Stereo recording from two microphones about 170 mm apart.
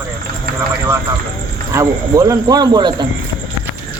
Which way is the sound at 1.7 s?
20° right (ahead or behind).